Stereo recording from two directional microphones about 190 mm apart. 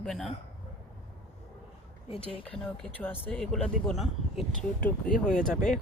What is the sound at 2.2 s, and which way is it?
Speech, 5° left (ahead or behind).